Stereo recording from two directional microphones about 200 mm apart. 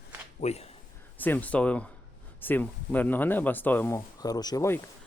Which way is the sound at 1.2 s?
10° left (ahead or behind).